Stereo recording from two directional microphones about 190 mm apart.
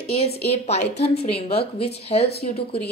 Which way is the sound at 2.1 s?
35° left (ahead or behind).